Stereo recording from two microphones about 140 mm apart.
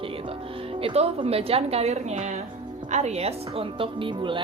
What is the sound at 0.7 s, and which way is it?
A woman's voice, 40° right (ahead or behind).